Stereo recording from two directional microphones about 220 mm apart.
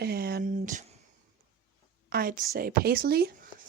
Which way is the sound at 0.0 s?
45° right (ahead or behind).